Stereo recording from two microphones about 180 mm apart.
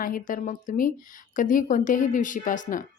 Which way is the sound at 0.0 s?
50° left (ahead or behind).